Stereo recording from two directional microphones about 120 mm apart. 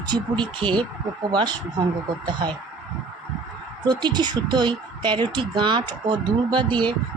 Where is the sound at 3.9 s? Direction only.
35° right (ahead or behind).